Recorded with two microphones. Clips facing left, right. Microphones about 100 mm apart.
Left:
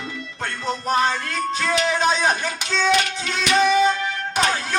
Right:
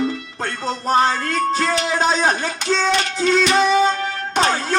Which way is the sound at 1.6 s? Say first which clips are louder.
Right 1 dB; 40° right (ahead or behind).